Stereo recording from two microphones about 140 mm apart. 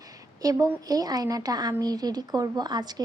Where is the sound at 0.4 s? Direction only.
25° right (ahead or behind).